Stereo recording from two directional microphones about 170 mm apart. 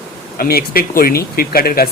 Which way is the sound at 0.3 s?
65° left (ahead or behind).